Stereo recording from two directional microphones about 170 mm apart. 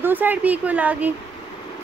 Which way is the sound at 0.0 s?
10° right (ahead or behind).